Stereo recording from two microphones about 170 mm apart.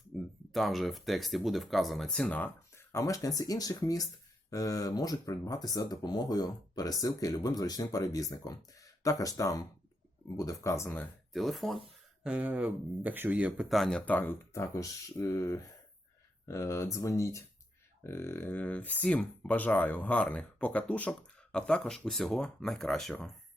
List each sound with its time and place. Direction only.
0.1 s a sound: centre (ahead or behind)
0.5 s speech: centre (ahead or behind)
11.3 s speech: centre (ahead or behind)